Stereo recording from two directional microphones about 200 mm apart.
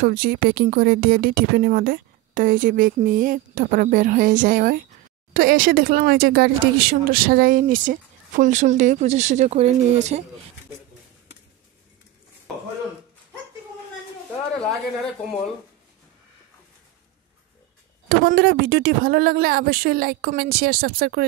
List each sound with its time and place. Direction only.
0.0 s speech: 45° right (ahead or behind)
18.0 s speech: 55° right (ahead or behind)